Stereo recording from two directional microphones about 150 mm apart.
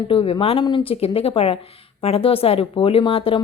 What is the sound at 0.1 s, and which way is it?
Speech, 40° left (ahead or behind).